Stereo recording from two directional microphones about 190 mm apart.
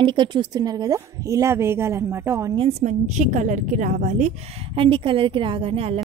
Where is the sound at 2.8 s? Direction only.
40° right (ahead or behind).